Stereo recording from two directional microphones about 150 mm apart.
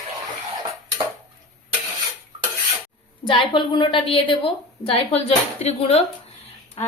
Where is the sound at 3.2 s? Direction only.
35° left (ahead or behind).